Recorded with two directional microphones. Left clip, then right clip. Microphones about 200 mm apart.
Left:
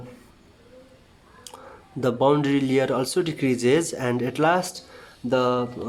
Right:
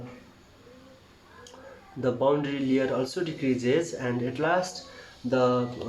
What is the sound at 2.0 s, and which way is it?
Speech, 50° left (ahead or behind).